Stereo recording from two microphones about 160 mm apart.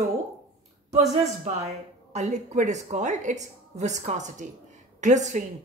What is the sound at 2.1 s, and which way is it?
A woman's voice, 45° right (ahead or behind).